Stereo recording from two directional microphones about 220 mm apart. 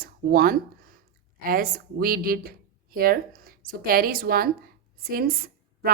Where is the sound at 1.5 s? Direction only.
40° right (ahead or behind).